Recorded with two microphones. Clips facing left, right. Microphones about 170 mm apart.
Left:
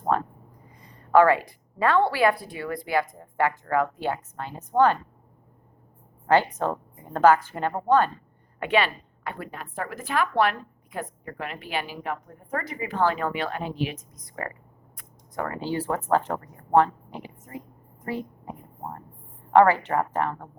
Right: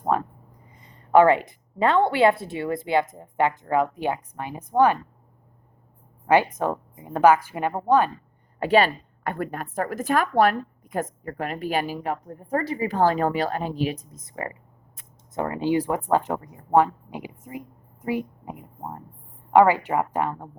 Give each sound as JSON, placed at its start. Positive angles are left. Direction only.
{"t": 0.1, "sound": "a woman's voice", "side_deg": -15}
{"t": 6.2, "sound": "a woman's voice", "side_deg": -15}
{"t": 8.5, "sound": "a woman's voice", "side_deg": -35}